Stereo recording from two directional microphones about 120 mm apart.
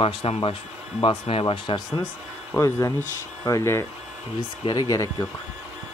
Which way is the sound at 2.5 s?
25° left (ahead or behind).